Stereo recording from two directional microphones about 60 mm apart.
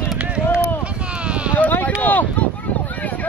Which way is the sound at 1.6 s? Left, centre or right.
Left.